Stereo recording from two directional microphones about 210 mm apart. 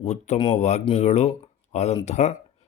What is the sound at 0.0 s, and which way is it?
Speech, 30° left (ahead or behind).